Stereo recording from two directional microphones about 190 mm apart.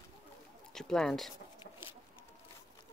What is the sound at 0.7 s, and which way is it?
Speech, 5° left (ahead or behind).